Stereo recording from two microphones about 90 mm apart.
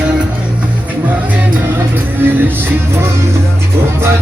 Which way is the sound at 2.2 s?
25° right (ahead or behind).